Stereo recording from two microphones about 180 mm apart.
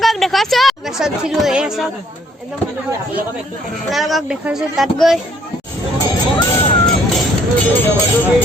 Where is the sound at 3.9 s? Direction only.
Centre (ahead or behind).